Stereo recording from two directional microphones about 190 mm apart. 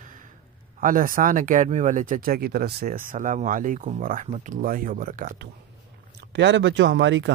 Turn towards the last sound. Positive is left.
turn(degrees=-75)  # may be behind; listen again after turning